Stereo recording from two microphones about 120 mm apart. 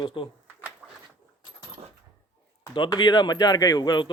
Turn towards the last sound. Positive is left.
turn(degrees=35)  # may be behind; listen again after turning